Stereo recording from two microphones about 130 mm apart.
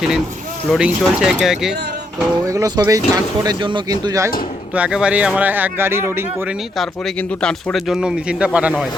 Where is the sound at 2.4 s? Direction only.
25° right (ahead or behind).